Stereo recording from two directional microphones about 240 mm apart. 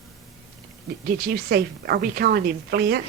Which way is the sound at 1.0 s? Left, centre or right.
Right.